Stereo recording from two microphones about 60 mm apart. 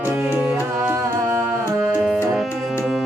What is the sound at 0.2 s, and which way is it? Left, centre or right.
Music, centre.